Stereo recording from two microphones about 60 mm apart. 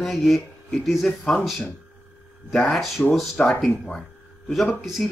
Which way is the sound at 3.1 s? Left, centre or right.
Centre.